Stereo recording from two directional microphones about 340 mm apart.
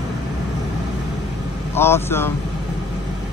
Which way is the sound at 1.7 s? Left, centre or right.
Centre.